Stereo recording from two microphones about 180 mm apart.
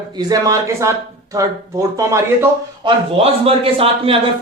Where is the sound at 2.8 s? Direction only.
30° right (ahead or behind).